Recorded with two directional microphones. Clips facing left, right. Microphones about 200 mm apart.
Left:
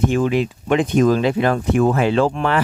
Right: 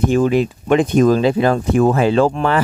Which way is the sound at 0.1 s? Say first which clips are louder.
Right 3 dB; 40° right (ahead or behind).